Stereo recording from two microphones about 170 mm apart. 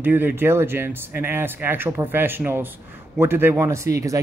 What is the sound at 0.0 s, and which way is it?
Speech, 10° right (ahead or behind).